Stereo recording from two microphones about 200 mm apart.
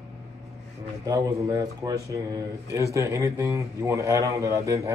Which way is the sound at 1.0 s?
20° right (ahead or behind).